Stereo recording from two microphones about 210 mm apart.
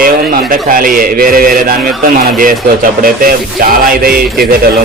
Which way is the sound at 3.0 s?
45° right (ahead or behind).